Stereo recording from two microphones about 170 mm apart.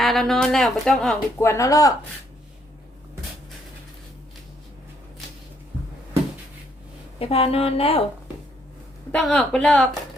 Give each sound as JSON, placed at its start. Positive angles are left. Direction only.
{"t": 0.0, "sound": "a woman's voice", "side_deg": 0}
{"t": 1.4, "sound": "speech", "side_deg": 15}
{"t": 7.2, "sound": "a woman's voice", "side_deg": 35}
{"t": 9.1, "sound": "a woman's voice", "side_deg": 5}